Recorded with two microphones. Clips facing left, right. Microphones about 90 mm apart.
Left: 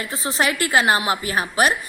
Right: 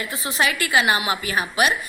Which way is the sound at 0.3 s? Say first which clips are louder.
Left 1 dB; 40° left (ahead or behind).